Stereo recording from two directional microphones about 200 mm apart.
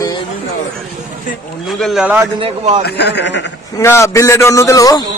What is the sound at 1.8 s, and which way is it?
Speech, 5° right (ahead or behind).